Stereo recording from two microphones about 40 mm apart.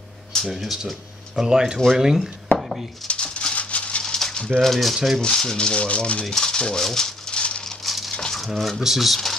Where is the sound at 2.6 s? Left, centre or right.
Centre.